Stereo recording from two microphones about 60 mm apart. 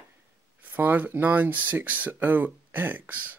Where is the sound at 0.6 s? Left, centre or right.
Right.